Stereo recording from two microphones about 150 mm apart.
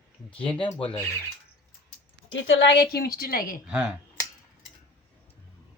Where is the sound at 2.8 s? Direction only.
90° left; by 3.6 s 75° left (ahead or behind).